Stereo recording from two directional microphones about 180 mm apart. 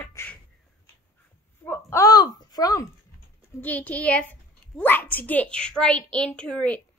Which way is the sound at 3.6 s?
10° left (ahead or behind).